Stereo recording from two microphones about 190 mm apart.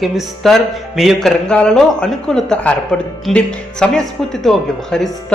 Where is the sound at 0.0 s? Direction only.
Centre (ahead or behind).